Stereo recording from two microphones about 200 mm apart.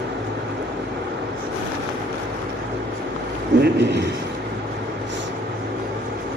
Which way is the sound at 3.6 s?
55° right (ahead or behind).